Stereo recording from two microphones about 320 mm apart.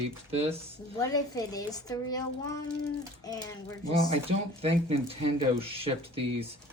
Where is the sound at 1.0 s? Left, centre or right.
Centre.